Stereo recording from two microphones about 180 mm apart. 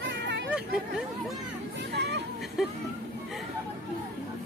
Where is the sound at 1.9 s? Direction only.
70° right (ahead or behind).